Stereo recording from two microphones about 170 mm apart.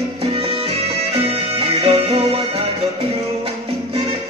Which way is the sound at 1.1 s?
35° right (ahead or behind).